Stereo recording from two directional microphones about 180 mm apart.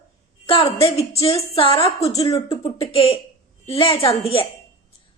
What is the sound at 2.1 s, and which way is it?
A woman's voice, 20° left (ahead or behind).